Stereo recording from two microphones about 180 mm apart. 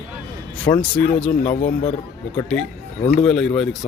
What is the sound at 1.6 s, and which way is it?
Speech, 40° left (ahead or behind).